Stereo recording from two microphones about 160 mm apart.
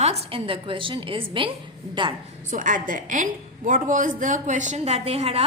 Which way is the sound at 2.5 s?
55° right (ahead or behind).